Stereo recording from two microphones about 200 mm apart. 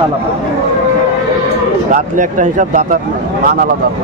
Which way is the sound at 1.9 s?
40° right (ahead or behind).